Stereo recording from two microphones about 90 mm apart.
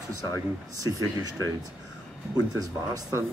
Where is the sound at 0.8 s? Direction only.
40° right (ahead or behind).